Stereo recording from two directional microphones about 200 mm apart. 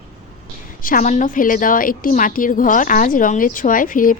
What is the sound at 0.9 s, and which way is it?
A woman's voice, 40° left (ahead or behind).